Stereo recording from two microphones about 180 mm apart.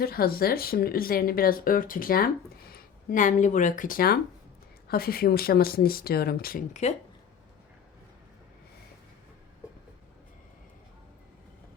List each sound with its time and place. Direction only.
0.0 s speech: 60° left (ahead or behind)